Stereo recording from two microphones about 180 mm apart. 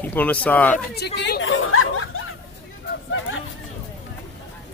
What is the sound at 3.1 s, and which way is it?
Speech, 90° left.